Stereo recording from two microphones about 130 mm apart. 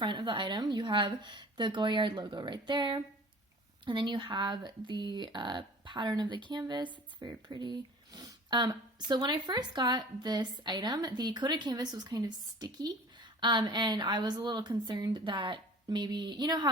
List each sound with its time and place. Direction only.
0.0 s a woman's voice: 40° right (ahead or behind)